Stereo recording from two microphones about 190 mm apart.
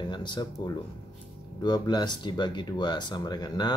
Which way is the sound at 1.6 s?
20° left (ahead or behind).